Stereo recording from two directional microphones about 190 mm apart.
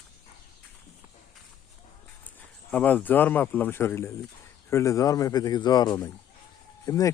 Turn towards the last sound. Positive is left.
turn(degrees=20)  # may be behind; listen again after turning